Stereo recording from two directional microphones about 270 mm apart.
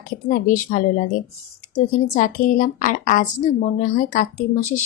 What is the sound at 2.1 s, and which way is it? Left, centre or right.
Speech, left.